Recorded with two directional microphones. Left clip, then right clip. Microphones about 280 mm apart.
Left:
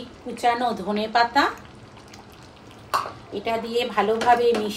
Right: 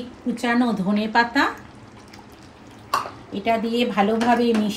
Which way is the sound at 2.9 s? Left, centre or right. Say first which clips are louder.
Right 1 dB; centre.